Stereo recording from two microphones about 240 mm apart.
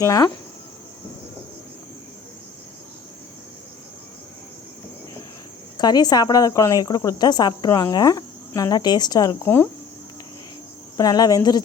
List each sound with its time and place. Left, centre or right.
0.0 s speech: centre
5.7 s speech: centre
10.9 s speech: centre